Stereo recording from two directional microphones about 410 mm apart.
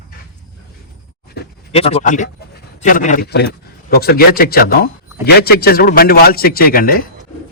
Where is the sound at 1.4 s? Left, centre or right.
Centre.